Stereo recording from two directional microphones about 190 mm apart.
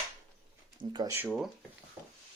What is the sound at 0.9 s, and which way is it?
Speech, 15° right (ahead or behind).